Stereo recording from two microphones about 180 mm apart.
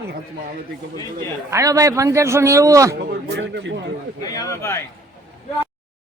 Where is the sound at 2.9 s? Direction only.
65° right (ahead or behind).